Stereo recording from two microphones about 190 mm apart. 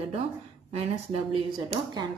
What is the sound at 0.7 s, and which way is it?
Speech, 30° right (ahead or behind).